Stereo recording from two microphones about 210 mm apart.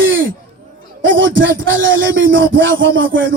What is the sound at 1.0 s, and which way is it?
A man's voice, 65° right (ahead or behind).